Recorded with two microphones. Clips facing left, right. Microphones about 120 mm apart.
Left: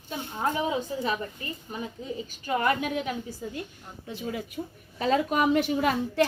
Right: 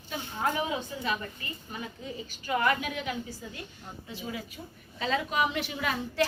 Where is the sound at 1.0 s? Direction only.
30° left (ahead or behind).